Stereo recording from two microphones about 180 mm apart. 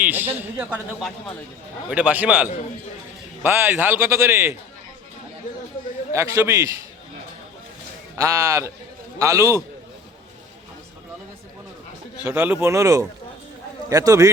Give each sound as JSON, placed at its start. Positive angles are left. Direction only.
{"t": 0.0, "sound": "speech", "side_deg": -10}
{"t": 6.1, "sound": "speech", "side_deg": -15}
{"t": 8.1, "sound": "a man's voice", "side_deg": -20}
{"t": 12.2, "sound": "a man's voice", "side_deg": -10}